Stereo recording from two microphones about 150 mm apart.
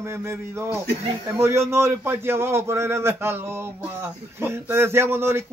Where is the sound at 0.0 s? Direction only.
15° right (ahead or behind).